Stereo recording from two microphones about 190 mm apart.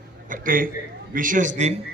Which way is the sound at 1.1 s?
45° right (ahead or behind).